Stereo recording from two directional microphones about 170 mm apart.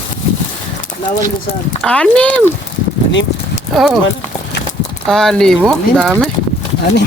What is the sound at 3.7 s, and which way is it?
Speech, centre (ahead or behind).